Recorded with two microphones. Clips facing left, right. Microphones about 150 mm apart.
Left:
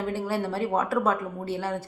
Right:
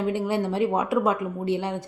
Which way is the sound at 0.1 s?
15° right (ahead or behind).